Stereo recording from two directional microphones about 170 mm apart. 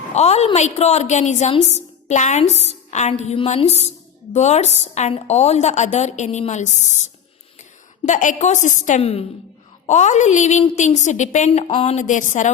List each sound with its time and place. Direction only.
0.1 s a woman's voice: 40° left (ahead or behind)
8.0 s a woman's voice: 50° left (ahead or behind)
11.9 s a woman's voice: 45° left (ahead or behind)